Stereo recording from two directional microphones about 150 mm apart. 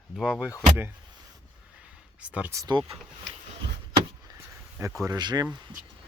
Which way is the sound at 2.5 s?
25° right (ahead or behind).